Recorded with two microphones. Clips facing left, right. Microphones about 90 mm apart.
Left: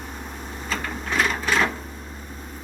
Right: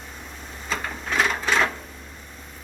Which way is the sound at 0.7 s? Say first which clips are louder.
Even; centre (ahead or behind).